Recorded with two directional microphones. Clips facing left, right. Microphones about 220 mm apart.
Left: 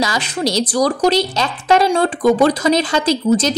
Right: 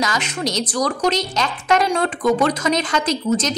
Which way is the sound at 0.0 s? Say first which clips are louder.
Left 4 dB; 35° left (ahead or behind).